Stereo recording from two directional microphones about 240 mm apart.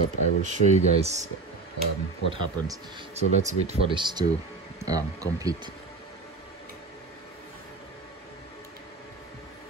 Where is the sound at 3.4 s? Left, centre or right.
Right.